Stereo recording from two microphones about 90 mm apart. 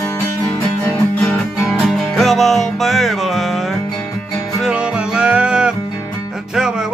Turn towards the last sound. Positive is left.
turn(degrees=-10)  # may be behind; listen again after turning